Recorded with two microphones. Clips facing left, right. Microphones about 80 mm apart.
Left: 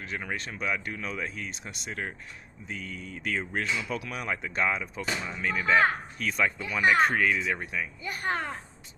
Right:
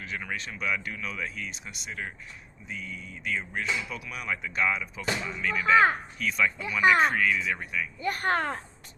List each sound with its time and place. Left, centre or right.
0.1 s speech: left
4.1 s speech: left
8.0 s a child's voice: right